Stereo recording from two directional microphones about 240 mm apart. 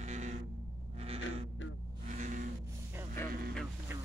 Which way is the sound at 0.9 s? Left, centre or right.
Right.